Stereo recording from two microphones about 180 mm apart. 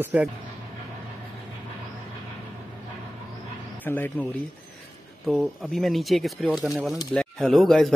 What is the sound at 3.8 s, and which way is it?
Speech, 10° left (ahead or behind).